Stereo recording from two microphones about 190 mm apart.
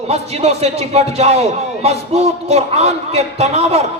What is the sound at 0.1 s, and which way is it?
A man's voice, 35° right (ahead or behind).